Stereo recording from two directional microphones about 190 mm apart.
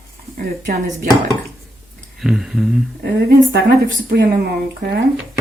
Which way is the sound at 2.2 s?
Centre (ahead or behind).